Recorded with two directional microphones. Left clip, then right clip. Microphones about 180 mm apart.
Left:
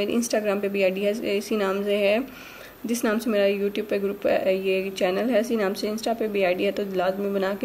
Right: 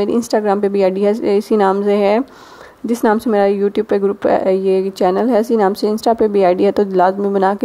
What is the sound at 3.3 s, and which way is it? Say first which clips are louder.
Speech: right 6 dB; 30° right (ahead or behind).